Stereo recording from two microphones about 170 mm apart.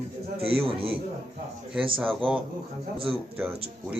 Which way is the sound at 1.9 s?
Centre (ahead or behind).